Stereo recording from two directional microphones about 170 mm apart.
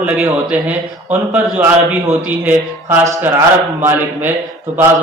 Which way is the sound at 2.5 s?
20° right (ahead or behind).